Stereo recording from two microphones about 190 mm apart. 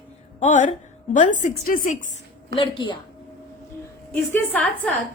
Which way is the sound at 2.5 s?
25° left (ahead or behind).